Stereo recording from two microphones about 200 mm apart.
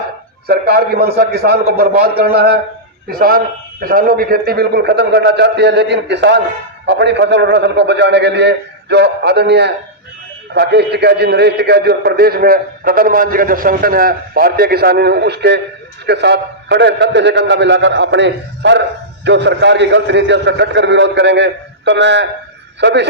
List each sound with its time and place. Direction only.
0.4 s a man's voice: 50° right (ahead or behind)